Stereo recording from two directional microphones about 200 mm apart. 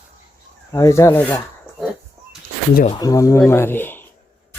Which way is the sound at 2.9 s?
20° left (ahead or behind).